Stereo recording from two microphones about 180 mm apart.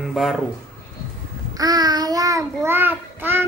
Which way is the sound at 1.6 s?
20° right (ahead or behind).